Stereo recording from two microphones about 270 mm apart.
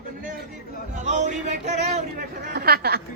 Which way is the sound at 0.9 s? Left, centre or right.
Right.